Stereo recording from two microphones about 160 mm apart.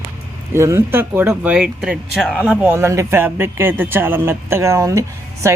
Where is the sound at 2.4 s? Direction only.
10° right (ahead or behind).